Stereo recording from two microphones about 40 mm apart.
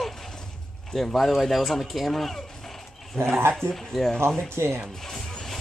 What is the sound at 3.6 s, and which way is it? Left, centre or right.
Speech, right.